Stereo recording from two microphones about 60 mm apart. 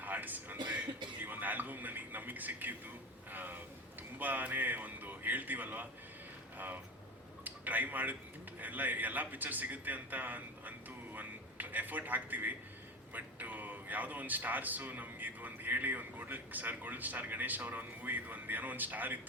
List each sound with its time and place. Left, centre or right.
0.0 s a man's voice: right
1.2 s a sound: right
3.3 s speech: right
7.4 s a man's voice: right